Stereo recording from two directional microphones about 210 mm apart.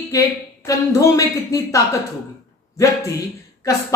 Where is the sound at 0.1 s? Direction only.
15° left (ahead or behind).